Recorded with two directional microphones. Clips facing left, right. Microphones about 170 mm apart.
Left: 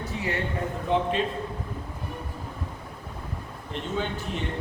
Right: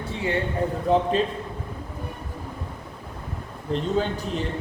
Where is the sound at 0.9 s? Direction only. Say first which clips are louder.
Right 4 dB; 40° right (ahead or behind).